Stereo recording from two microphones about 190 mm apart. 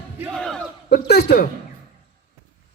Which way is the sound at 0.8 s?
55° left (ahead or behind).